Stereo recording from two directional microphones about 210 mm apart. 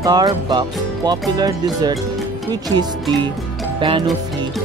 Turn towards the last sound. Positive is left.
turn(degrees=-25)  # may be behind; listen again after turning